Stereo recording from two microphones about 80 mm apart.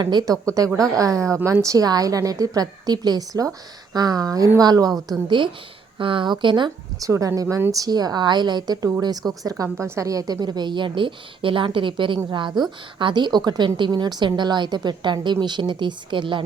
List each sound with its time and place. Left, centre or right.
0.0 s a woman's voice: right
0.4 s a woman's voice: right
5.4 s a woman's voice: right
7.0 s a woman's voice: right
9.8 s a woman's voice: right